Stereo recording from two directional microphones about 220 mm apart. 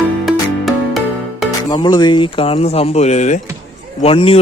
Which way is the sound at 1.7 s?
20° left (ahead or behind).